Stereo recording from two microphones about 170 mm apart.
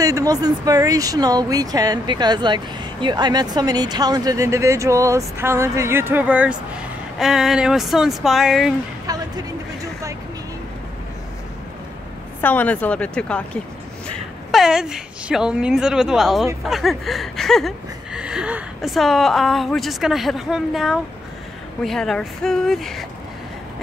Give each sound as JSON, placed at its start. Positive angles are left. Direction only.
{"t": 0.0, "sound": "speech", "side_deg": -20}
{"t": 9.0, "sound": "a sound", "side_deg": -20}
{"t": 12.4, "sound": "a woman's voice", "side_deg": 10}